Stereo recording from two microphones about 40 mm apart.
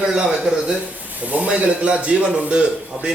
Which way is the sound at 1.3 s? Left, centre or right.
Right.